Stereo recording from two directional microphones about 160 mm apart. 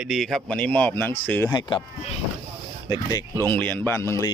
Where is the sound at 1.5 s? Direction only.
25° left (ahead or behind).